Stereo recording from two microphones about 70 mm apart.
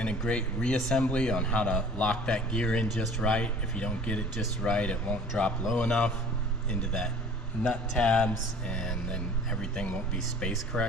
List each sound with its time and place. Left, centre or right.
0.3 s speech: centre